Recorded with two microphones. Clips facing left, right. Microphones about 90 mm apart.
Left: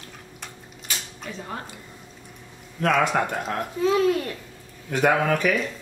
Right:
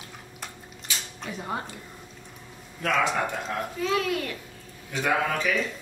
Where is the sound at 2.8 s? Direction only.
60° left (ahead or behind).